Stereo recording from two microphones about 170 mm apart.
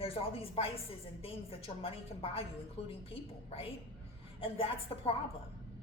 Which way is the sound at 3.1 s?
35° left (ahead or behind).